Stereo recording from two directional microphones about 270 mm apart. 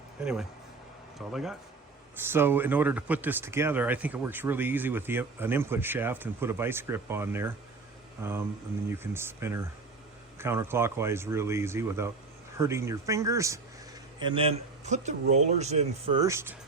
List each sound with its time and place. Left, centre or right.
0.2 s speech: centre